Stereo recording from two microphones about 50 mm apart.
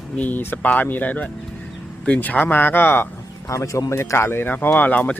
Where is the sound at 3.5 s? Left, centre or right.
Left.